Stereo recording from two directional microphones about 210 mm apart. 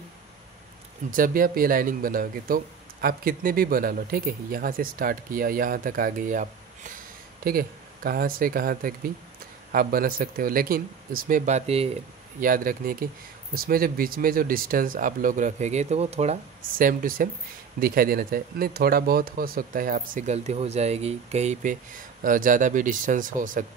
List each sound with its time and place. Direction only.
1.1 s speech: 40° right (ahead or behind)
12.4 s speech: 40° right (ahead or behind)